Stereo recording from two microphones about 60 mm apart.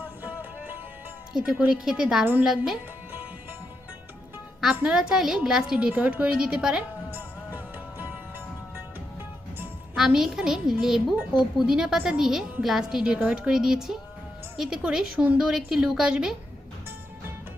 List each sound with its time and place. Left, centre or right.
0.0 s music: right
1.3 s a woman's voice: centre
4.7 s a woman's voice: right
4.9 s a woman's voice: centre
5.9 s a woman's voice: right
7.1 s music: right
9.9 s a woman's voice: centre